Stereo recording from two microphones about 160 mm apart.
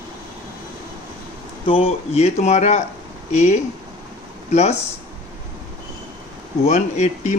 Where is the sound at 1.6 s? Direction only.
35° left (ahead or behind).